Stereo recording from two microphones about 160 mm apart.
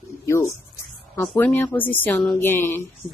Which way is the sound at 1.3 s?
10° left (ahead or behind).